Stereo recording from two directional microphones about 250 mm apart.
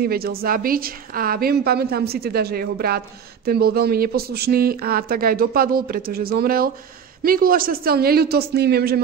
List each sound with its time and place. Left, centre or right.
0.0 s speech: right